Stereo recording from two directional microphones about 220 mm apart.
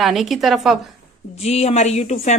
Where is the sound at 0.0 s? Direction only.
Centre (ahead or behind).